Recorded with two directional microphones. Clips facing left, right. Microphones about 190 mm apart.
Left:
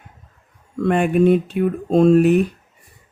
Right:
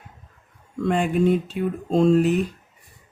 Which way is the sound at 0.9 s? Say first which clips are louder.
Left 5 dB; 60° left (ahead or behind).